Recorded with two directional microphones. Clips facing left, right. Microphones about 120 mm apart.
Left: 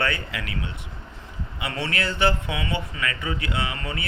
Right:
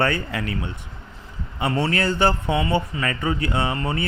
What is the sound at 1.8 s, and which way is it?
Speech, 40° right (ahead or behind).